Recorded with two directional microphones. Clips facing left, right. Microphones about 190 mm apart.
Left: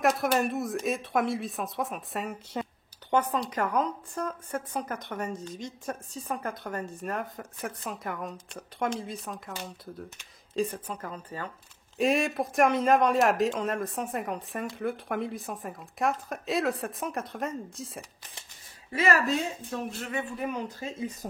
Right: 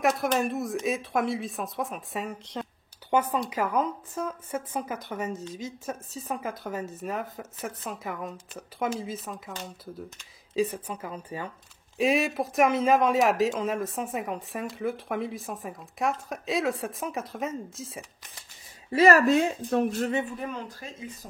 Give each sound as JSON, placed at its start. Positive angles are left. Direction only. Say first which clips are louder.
{"t": 0.0, "sound": "a woman's voice", "louder": "even", "side_deg": 0}
{"t": 3.1, "sound": "a woman's voice", "louder": "right 1 dB", "side_deg": -10}
{"t": 10.5, "sound": "speech", "louder": "right 3 dB", "side_deg": -5}
{"t": 12.0, "sound": "a woman's voice", "louder": "right 1 dB", "side_deg": 0}
{"t": 18.9, "sound": "speech", "louder": "right 7 dB", "side_deg": -40}
{"t": 20.3, "sound": "speech", "louder": "left 2 dB", "side_deg": 10}